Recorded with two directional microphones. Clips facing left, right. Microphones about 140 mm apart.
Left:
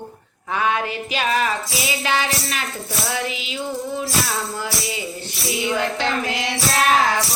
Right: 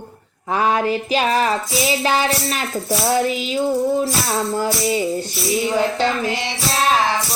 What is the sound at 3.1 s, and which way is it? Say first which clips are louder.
Music: right 9 dB; 45° right (ahead or behind).